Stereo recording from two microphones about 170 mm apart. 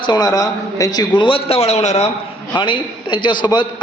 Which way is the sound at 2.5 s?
30° left (ahead or behind).